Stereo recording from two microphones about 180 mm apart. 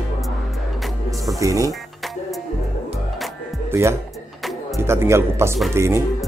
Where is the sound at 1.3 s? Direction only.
20° right (ahead or behind).